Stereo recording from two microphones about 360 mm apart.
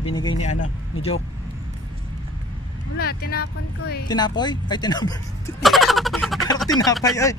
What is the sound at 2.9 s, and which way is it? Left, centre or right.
Speech, left.